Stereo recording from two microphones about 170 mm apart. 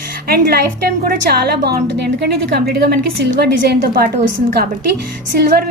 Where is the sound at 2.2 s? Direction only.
70° right (ahead or behind).